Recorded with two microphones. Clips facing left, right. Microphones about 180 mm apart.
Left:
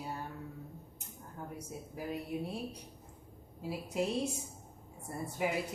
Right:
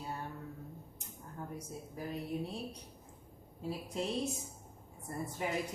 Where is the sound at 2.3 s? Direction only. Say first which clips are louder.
Even; 5° left (ahead or behind).